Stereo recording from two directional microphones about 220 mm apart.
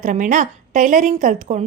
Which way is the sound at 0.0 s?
35° right (ahead or behind).